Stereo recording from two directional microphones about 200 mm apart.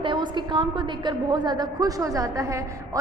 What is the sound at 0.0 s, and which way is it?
A woman's voice, 25° right (ahead or behind).